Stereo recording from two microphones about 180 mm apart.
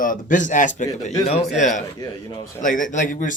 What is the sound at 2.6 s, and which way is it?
Speech, 45° left (ahead or behind).